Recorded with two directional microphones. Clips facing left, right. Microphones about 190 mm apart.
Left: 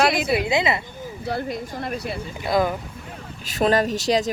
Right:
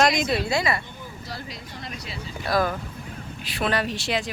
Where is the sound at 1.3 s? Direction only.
55° left (ahead or behind).